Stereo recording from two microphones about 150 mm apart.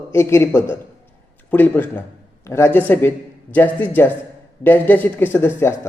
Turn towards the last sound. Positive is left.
turn(degrees=15)  # may be behind; listen again after turning